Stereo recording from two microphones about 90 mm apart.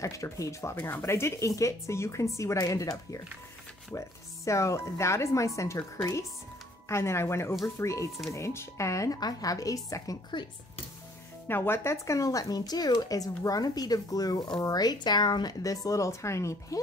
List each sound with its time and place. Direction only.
0.0 s speech: 35° left (ahead or behind)
10.4 s speech: 55° left (ahead or behind)
11.4 s speech: 25° left (ahead or behind)